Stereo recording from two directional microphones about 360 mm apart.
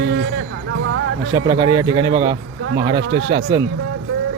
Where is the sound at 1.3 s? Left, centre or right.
Centre.